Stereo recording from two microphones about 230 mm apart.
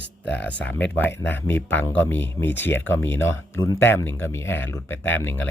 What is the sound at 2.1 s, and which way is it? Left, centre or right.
Speech, left.